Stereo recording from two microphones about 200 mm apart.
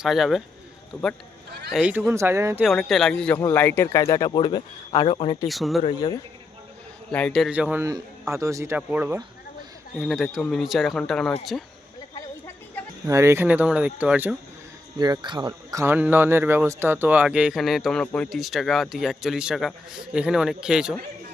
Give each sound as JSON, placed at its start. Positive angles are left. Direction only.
{"t": 0.0, "sound": "speech", "side_deg": 0}
{"t": 1.7, "sound": "a man's voice", "side_deg": -5}
{"t": 2.6, "sound": "speech", "side_deg": 0}
{"t": 5.5, "sound": "speech", "side_deg": 0}
{"t": 5.8, "sound": "speech", "side_deg": 20}
{"t": 7.1, "sound": "a man's voice", "side_deg": 5}
{"t": 13.1, "sound": "a man's voice", "side_deg": -15}
{"t": 14.9, "sound": "speech", "side_deg": -20}